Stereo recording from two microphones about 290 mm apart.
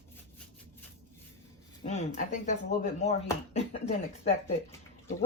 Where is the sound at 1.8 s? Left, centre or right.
Left.